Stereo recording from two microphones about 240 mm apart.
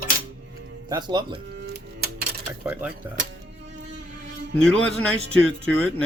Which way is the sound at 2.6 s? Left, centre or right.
Centre.